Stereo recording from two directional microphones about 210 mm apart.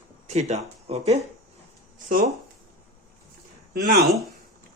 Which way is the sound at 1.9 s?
40° right (ahead or behind).